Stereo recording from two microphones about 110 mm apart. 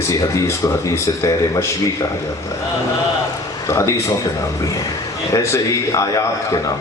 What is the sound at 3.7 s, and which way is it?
Speech, 25° left (ahead or behind).